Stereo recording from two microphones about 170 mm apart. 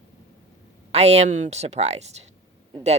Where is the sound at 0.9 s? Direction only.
40° right (ahead or behind).